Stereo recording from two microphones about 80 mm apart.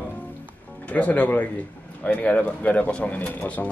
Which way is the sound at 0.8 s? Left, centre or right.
Centre.